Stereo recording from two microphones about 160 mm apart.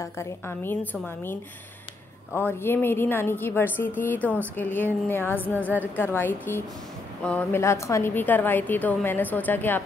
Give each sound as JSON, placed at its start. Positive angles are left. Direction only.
{"t": 0.0, "sound": "a woman's voice", "side_deg": 15}